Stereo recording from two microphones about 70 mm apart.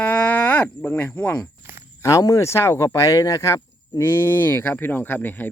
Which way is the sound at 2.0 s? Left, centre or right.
Left.